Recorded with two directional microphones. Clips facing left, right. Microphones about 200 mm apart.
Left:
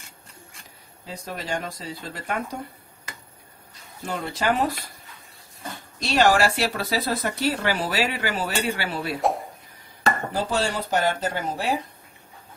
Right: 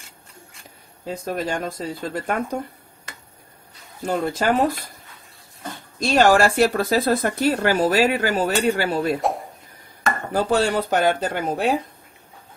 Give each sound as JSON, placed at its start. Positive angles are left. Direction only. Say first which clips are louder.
{"t": 1.0, "sound": "speech", "louder": "right 7 dB", "side_deg": -50}
{"t": 4.0, "sound": "speech", "louder": "right 5 dB", "side_deg": -45}
{"t": 5.9, "sound": "speech", "louder": "right 4 dB", "side_deg": -50}
{"t": 9.2, "sound": "a sound", "louder": "even", "side_deg": 0}
{"t": 10.3, "sound": "speech", "louder": "right 6 dB", "side_deg": -55}